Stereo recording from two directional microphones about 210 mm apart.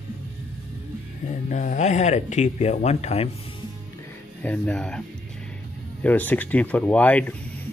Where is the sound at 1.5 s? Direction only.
35° left (ahead or behind).